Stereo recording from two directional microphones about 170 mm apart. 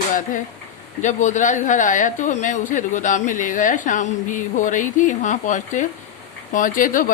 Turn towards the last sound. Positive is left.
turn(degrees=55)  # may be behind; listen again after turning